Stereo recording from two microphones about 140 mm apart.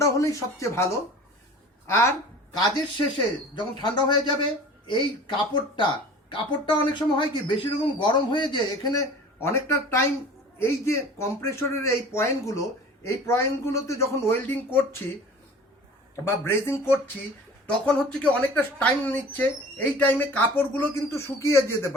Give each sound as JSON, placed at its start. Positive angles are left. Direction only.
{"t": 0.0, "sound": "speech", "side_deg": 20}
{"t": 2.5, "sound": "speech", "side_deg": 25}
{"t": 16.2, "sound": "speech", "side_deg": 15}